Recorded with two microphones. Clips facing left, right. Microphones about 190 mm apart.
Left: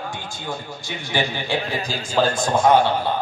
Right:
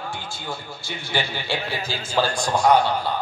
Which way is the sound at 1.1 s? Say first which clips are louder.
Left 3 dB; 20° left (ahead or behind).